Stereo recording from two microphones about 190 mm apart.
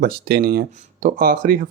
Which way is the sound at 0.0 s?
55° right (ahead or behind).